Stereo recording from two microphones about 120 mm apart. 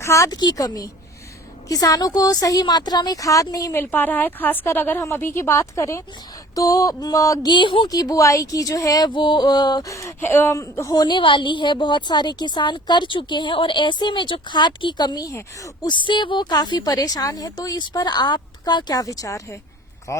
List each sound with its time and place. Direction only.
0.0 s a woman's voice: 25° left (ahead or behind)
15.9 s a woman's voice: 40° left (ahead or behind); by 20.2 s 25° left (ahead or behind)